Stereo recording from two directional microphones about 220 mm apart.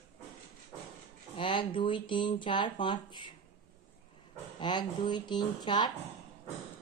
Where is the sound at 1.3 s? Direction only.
25° left (ahead or behind).